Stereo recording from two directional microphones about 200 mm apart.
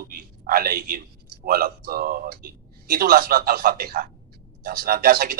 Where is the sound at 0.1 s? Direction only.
45° right (ahead or behind).